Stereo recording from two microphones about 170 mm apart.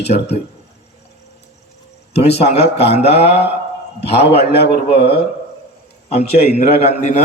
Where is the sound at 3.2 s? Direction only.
75° left (ahead or behind).